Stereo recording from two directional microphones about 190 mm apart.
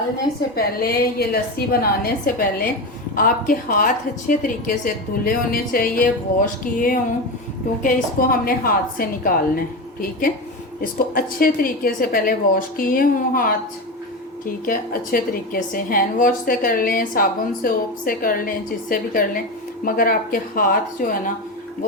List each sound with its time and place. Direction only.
0.5 s a woman's voice: 50° left (ahead or behind)